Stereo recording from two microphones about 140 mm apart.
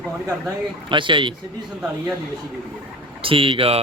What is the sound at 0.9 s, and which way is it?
Speech, 35° right (ahead or behind).